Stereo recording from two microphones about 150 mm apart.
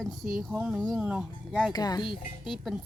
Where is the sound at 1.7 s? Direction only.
25° left (ahead or behind).